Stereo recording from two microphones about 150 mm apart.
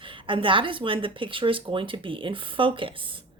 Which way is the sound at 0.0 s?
35° right (ahead or behind).